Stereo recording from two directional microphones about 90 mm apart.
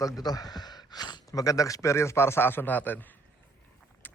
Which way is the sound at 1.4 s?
40° left (ahead or behind).